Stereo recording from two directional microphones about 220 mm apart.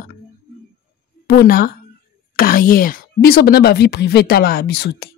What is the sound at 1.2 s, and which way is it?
Speech, 45° left (ahead or behind).